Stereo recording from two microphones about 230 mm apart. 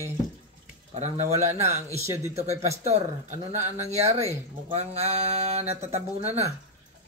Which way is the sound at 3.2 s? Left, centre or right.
Centre.